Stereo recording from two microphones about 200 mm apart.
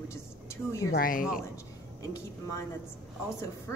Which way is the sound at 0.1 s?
15° left (ahead or behind).